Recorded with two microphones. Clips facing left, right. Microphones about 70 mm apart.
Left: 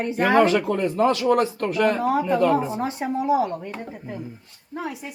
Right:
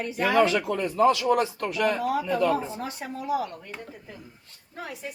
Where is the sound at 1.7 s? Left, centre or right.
Left.